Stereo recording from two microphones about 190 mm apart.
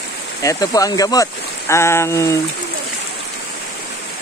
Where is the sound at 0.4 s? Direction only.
20° left (ahead or behind).